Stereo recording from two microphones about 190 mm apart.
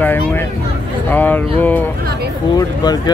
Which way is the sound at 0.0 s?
10° left (ahead or behind).